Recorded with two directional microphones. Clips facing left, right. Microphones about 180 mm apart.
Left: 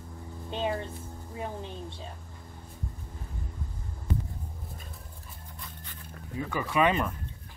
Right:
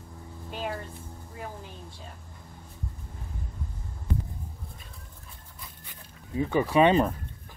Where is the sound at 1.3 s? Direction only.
25° left (ahead or behind).